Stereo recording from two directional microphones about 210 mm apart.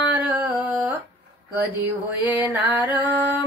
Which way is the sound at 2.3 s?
10° right (ahead or behind).